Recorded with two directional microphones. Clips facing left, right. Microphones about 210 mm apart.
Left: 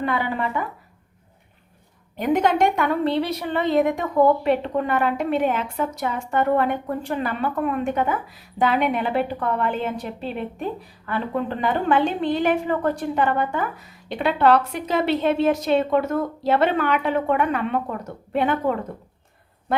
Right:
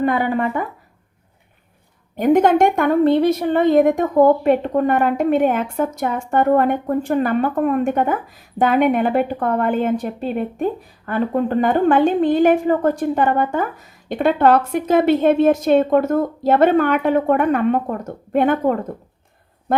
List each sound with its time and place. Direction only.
0.0 s a woman's voice: 45° right (ahead or behind)
2.1 s a woman's voice: 50° right (ahead or behind)